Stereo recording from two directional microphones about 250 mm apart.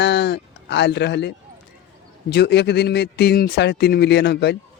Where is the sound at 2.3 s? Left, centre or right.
Left.